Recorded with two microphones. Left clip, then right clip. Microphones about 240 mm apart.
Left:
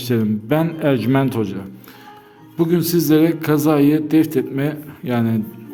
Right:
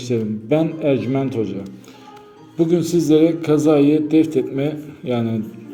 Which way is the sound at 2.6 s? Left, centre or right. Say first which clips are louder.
Even; left.